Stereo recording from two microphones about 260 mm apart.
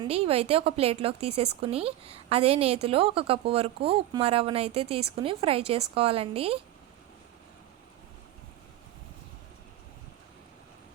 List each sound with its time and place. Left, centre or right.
0.0 s a woman's voice: right